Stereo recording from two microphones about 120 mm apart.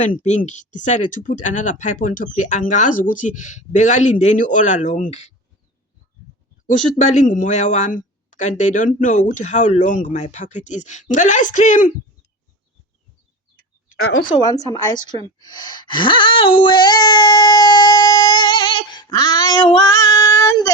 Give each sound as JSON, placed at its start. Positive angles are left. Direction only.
{"t": 0.0, "sound": "speech", "side_deg": 85}
{"t": 7.0, "sound": "speech", "side_deg": 85}
{"t": 14.4, "sound": "speech", "side_deg": 30}